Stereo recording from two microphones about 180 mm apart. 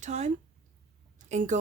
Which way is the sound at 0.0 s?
40° right (ahead or behind).